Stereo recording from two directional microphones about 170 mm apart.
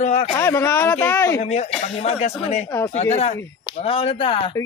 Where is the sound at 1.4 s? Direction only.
40° left (ahead or behind).